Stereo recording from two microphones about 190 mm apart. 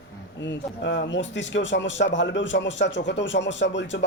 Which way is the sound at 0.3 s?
70° left (ahead or behind).